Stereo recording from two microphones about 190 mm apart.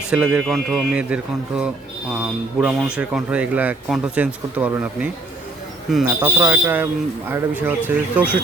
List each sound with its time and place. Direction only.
0.1 s a man's voice: 5° right (ahead or behind)